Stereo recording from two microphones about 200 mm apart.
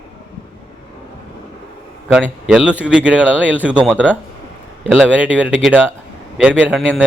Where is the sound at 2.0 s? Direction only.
Centre (ahead or behind).